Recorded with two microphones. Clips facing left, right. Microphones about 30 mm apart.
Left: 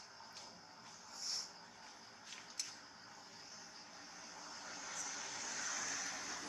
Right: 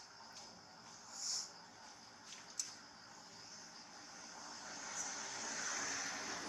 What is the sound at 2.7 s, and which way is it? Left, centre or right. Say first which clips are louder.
Vehicle: left 1 dB; centre.